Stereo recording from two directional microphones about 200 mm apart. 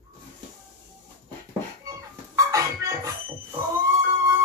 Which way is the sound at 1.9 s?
15° right (ahead or behind).